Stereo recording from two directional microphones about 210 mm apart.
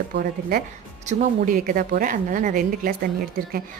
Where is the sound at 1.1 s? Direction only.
40° right (ahead or behind).